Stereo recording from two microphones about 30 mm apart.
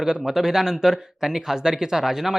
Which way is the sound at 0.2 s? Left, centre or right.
Centre.